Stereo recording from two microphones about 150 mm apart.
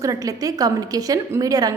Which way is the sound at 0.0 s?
25° right (ahead or behind).